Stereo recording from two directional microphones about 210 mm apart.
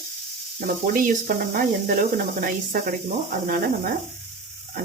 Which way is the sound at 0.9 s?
40° right (ahead or behind).